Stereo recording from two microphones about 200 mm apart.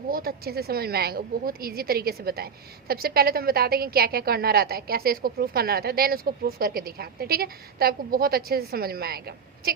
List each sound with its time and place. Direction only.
0.1 s a woman's voice: 50° right (ahead or behind)